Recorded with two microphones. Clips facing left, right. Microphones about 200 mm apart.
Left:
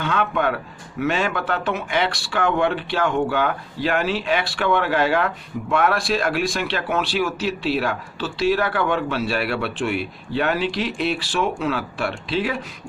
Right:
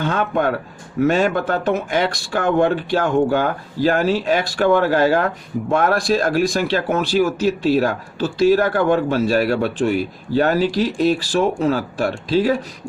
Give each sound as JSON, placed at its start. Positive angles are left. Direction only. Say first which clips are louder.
{"t": 0.0, "sound": "speech", "louder": "right 3 dB", "side_deg": -45}